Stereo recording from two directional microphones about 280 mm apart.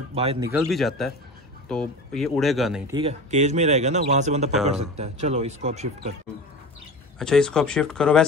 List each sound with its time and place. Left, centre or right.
0.1 s speech: right
0.5 s speech: centre
2.9 s speech: centre
7.2 s speech: centre